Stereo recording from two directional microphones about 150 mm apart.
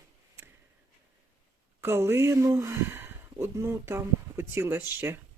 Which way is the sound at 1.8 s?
15° right (ahead or behind).